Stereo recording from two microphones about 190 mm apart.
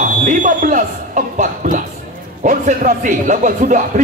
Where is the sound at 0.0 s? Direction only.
45° right (ahead or behind).